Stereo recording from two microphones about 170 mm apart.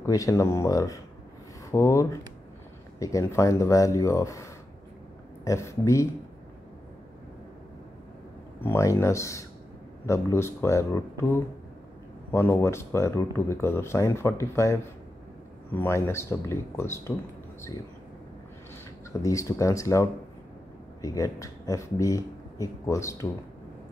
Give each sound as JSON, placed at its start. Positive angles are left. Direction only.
{"t": 0.0, "sound": "speech", "side_deg": 20}
{"t": 8.5, "sound": "speech", "side_deg": 15}
{"t": 19.2, "sound": "speech", "side_deg": 20}